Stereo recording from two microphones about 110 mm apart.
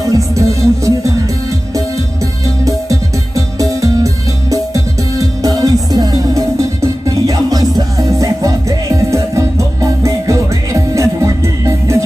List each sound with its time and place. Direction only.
0.0 s music: 30° right (ahead or behind)
2.4 s music: 30° right (ahead or behind)